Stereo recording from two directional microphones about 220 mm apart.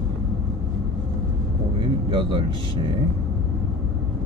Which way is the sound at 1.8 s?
20° right (ahead or behind).